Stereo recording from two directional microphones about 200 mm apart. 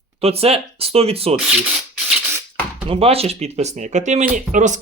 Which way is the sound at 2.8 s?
30° right (ahead or behind).